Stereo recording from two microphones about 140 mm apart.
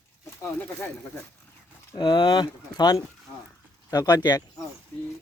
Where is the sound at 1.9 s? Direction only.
35° left (ahead or behind).